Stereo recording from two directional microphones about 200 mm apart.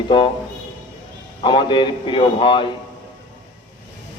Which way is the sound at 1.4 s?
25° left (ahead or behind).